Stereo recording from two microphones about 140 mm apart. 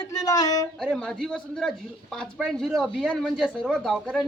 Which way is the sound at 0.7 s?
5° left (ahead or behind).